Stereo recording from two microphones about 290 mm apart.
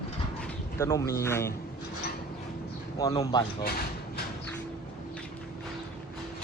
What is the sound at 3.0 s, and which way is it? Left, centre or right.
Speech, centre.